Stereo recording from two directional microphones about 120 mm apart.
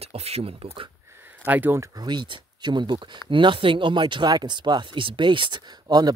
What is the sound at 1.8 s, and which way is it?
Speech, 35° right (ahead or behind).